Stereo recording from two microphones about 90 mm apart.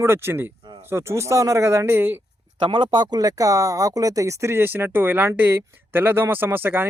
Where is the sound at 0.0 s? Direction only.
25° right (ahead or behind).